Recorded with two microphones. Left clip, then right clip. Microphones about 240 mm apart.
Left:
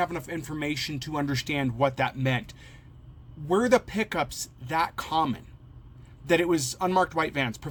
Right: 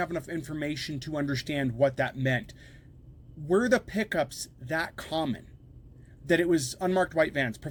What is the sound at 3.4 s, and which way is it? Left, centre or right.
Speech, left.